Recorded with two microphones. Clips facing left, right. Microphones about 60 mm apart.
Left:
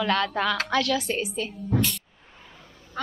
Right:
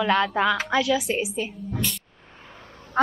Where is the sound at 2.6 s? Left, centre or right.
Right.